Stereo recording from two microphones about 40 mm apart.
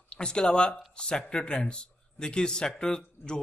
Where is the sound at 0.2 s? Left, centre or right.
Left.